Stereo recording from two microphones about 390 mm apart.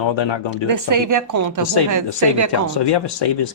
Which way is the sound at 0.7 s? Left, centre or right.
Right.